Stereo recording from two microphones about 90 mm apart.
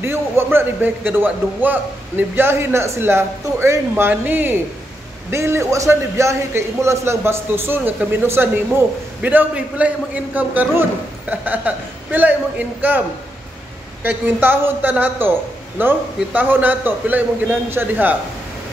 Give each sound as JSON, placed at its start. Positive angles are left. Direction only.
{"t": 0.0, "sound": "a man's voice", "side_deg": -25}
{"t": 3.9, "sound": "a man's voice", "side_deg": -20}
{"t": 5.3, "sound": "a man's voice", "side_deg": -30}
{"t": 14.0, "sound": "a man's voice", "side_deg": -25}